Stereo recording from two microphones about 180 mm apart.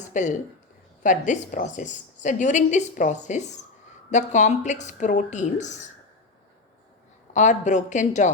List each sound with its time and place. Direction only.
0.1 s a woman's voice: 40° left (ahead or behind)
7.3 s a woman's voice: 40° left (ahead or behind)